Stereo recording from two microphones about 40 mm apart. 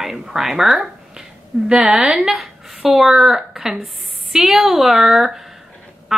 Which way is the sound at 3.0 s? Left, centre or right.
Centre.